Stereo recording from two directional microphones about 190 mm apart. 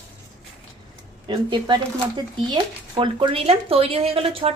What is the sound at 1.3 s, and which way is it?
Speech, 25° right (ahead or behind).